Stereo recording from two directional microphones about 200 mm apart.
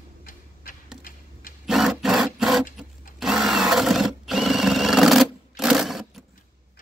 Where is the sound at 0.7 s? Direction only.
45° left (ahead or behind).